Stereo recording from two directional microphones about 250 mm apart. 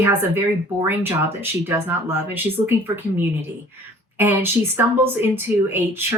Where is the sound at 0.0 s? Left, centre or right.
Centre.